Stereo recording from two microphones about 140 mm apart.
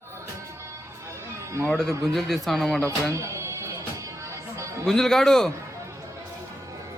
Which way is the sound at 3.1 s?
20° right (ahead or behind).